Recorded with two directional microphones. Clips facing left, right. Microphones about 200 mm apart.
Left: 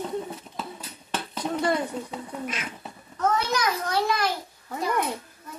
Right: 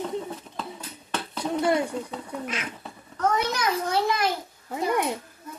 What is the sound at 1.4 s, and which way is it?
Speech, 10° right (ahead or behind).